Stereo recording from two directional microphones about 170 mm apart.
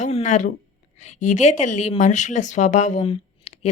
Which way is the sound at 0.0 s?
40° left (ahead or behind).